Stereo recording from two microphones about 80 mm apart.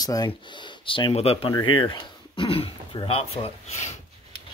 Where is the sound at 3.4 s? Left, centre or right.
Left.